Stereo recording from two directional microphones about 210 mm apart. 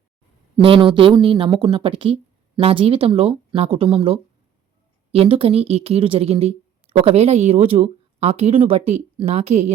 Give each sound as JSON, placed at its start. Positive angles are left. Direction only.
{"t": 0.6, "sound": "speech", "side_deg": -25}